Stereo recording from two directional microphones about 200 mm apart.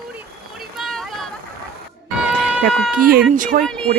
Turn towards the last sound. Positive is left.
turn(degrees=5)  # may be behind; listen again after turning